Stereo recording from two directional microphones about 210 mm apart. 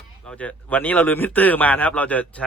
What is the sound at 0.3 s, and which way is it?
Speech, 5° left (ahead or behind).